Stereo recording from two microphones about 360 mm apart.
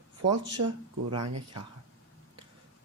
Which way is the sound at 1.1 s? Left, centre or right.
Right.